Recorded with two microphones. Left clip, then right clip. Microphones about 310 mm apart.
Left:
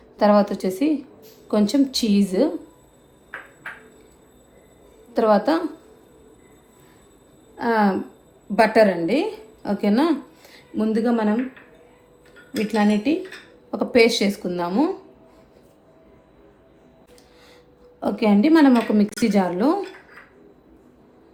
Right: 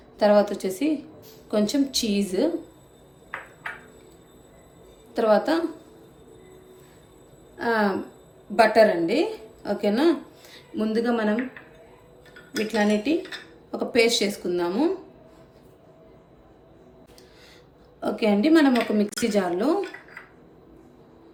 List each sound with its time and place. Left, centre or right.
0.2 s a woman's voice: left
5.1 s a woman's voice: centre
7.5 s a woman's voice: centre
12.5 s a woman's voice: left
18.0 s a woman's voice: centre